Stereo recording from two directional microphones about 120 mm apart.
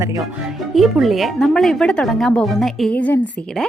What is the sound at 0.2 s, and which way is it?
Speech, centre (ahead or behind).